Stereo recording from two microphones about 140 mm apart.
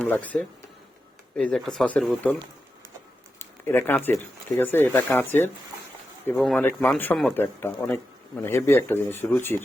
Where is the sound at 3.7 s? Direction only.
15° left (ahead or behind).